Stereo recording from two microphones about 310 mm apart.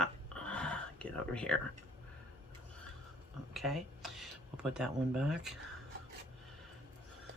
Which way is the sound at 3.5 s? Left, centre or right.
Centre.